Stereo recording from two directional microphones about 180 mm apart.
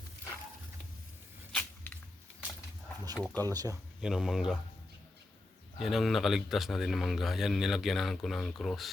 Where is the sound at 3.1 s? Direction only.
5° left (ahead or behind).